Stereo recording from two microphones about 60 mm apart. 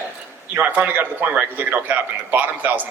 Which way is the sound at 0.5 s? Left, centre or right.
Right.